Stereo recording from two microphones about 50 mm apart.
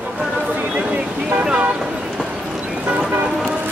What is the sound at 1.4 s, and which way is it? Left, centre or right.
Speech, right.